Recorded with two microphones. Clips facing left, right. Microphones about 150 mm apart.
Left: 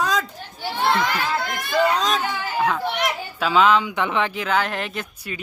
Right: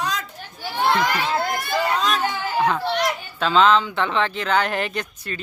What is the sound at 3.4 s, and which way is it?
Speech, 10° left (ahead or behind).